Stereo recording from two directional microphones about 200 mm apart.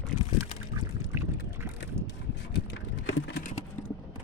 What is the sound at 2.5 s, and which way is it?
Vehicle, 65° left (ahead or behind).